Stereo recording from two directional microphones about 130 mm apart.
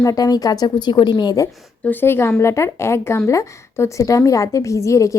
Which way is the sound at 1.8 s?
15° left (ahead or behind).